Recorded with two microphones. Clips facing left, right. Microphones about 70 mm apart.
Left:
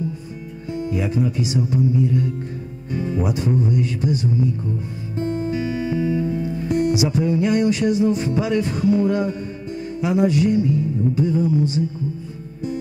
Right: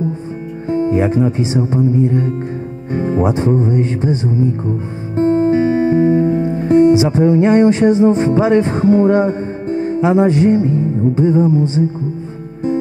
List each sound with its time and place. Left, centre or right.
0.7 s speech: right
5.1 s music: right